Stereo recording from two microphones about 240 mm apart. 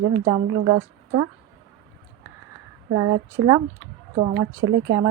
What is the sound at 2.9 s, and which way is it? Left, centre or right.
Speech, right.